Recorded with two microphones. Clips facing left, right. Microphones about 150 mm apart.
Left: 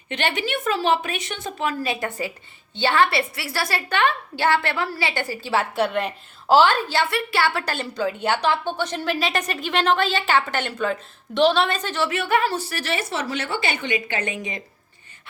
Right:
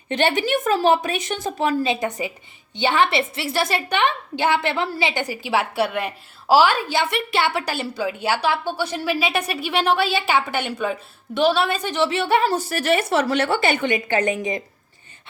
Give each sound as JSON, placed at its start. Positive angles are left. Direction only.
{"t": 0.1, "sound": "speech", "side_deg": -35}
{"t": 1.8, "sound": "a woman's voice", "side_deg": -20}
{"t": 12.5, "sound": "a woman's voice", "side_deg": -45}